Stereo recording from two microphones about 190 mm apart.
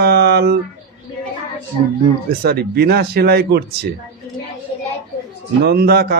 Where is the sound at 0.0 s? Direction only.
60° right (ahead or behind).